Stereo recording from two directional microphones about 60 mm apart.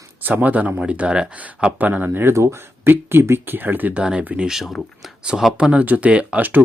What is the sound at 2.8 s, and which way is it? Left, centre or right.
Speech, right.